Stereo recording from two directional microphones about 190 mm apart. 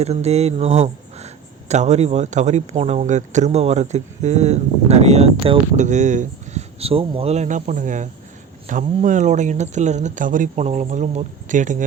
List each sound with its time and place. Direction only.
0.0 s speech: 35° right (ahead or behind)